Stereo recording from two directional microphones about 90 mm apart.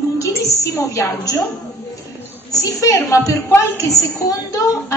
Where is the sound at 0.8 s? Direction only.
35° left (ahead or behind).